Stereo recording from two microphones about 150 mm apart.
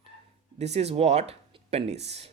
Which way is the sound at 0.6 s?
45° right (ahead or behind).